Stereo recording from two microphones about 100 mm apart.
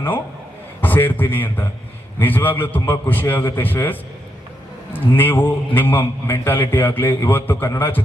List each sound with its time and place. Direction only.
0.8 s a man's voice: 20° left (ahead or behind)
4.9 s a man's voice: 20° left (ahead or behind)